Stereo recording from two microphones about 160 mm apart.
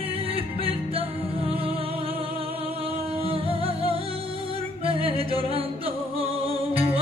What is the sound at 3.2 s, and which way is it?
Music, 35° right (ahead or behind).